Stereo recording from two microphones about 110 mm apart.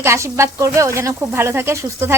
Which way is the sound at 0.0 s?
25° right (ahead or behind).